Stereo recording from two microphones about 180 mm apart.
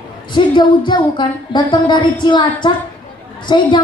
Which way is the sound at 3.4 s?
25° left (ahead or behind).